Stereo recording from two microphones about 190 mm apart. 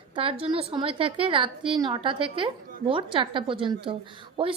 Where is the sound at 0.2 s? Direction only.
30° right (ahead or behind).